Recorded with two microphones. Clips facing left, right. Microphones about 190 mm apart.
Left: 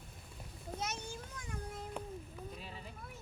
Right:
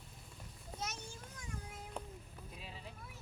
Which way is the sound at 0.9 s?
65° left (ahead or behind).